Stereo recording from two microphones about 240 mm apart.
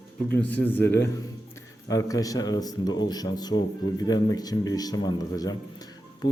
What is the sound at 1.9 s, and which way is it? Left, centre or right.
A man's voice, centre.